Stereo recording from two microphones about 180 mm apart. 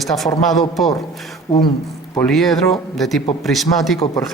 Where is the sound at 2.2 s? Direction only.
Centre (ahead or behind).